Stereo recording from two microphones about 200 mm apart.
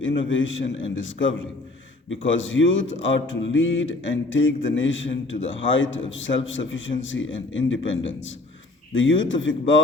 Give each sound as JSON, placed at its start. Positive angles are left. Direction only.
{"t": 0.0, "sound": "speech", "side_deg": 70}